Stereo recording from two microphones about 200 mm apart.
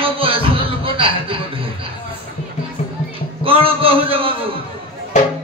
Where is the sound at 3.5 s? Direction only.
25° right (ahead or behind).